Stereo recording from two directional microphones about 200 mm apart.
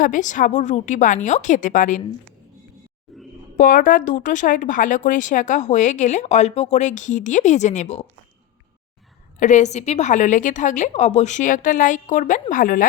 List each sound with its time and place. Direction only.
0.0 s speech: 40° left (ahead or behind)
3.1 s a sound: centre (ahead or behind)
3.6 s speech: 45° left (ahead or behind)
9.4 s speech: 35° left (ahead or behind)